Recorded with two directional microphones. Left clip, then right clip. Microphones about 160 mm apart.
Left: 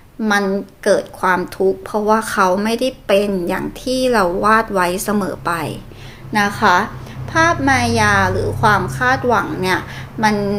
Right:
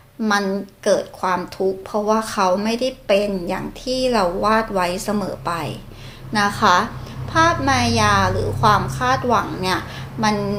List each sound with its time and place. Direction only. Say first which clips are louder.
0.2 s a woman's voice: left 3 dB; 25° left (ahead or behind)